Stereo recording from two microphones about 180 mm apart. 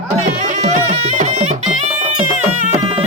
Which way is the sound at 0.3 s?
45° right (ahead or behind).